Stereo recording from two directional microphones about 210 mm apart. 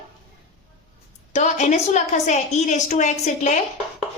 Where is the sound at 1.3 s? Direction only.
35° left (ahead or behind).